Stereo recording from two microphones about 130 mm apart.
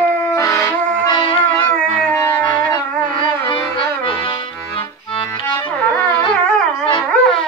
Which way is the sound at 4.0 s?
40° left (ahead or behind).